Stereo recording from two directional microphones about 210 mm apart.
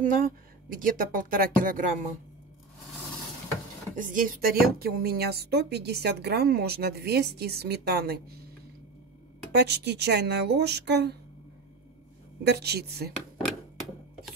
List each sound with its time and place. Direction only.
0.0 s speech: 40° right (ahead or behind)
3.9 s speech: 40° right (ahead or behind)
9.5 s speech: 50° right (ahead or behind)
12.4 s speech: 50° right (ahead or behind)